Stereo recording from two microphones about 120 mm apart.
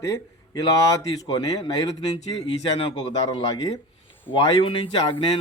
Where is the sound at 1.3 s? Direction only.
35° left (ahead or behind).